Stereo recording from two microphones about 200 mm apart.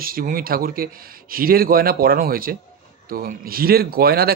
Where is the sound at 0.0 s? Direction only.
45° right (ahead or behind).